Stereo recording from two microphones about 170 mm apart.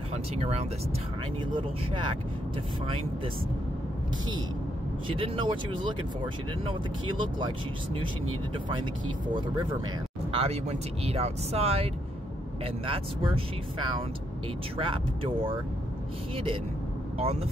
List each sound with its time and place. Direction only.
0.1 s speech: 40° right (ahead or behind)
5.0 s speech: 30° right (ahead or behind)
10.3 s speech: 35° right (ahead or behind)
17.2 s speech: 35° right (ahead or behind)